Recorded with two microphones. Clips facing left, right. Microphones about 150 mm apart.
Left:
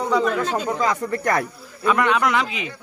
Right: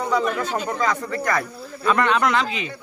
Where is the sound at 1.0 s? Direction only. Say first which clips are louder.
Left 2 dB; 50° left (ahead or behind).